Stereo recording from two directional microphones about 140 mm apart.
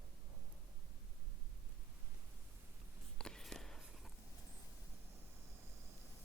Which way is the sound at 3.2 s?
5° left (ahead or behind).